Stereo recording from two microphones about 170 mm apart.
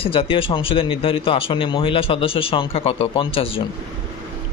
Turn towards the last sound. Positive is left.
turn(degrees=35)  # may be behind; listen again after turning